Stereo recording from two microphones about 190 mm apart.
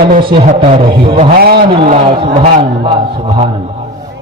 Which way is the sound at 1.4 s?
55° right (ahead or behind).